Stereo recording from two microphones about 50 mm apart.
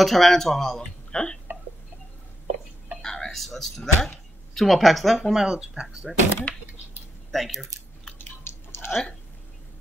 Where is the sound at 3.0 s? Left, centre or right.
Centre.